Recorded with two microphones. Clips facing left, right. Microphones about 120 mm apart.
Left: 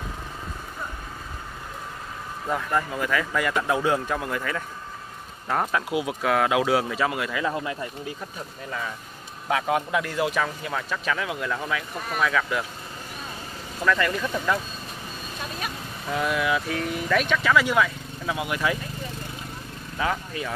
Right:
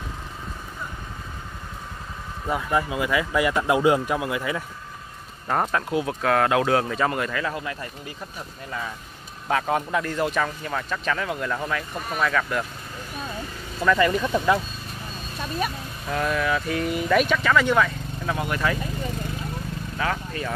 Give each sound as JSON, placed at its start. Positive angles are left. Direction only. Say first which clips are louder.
{"t": 2.4, "sound": "speech", "louder": "right 2 dB", "side_deg": -5}
{"t": 7.4, "sound": "speech", "louder": "left 2 dB", "side_deg": 20}
{"t": 9.5, "sound": "speech", "louder": "right 1 dB", "side_deg": 5}
{"t": 13.8, "sound": "speech", "louder": "right 3 dB", "side_deg": -10}
{"t": 16.1, "sound": "speech", "louder": "even", "side_deg": 5}
{"t": 20.0, "sound": "speech", "louder": "left 1 dB", "side_deg": 10}